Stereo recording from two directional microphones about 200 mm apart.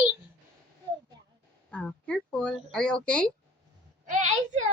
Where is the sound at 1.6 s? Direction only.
5° left (ahead or behind).